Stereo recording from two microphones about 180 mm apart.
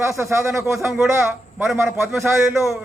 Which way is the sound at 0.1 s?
15° right (ahead or behind).